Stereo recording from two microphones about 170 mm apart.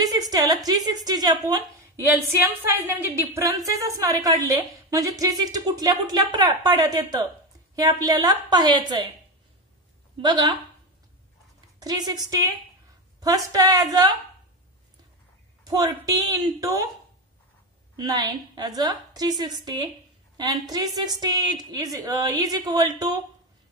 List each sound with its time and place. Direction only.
0.0 s a sound: 20° right (ahead or behind)
0.7 s a woman's voice: 25° right (ahead or behind)
10.2 s a woman's voice: 20° right (ahead or behind)
11.8 s a woman's voice: 25° right (ahead or behind)
15.6 s a woman's voice: 20° right (ahead or behind)
17.9 s a woman's voice: 25° right (ahead or behind)